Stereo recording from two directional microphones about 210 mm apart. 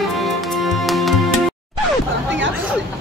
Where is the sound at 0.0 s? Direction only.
Centre (ahead or behind).